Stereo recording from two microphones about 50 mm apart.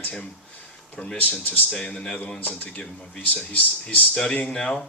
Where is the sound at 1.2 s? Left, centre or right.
Left.